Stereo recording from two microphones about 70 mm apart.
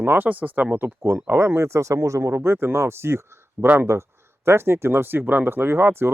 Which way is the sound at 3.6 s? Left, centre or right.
Right.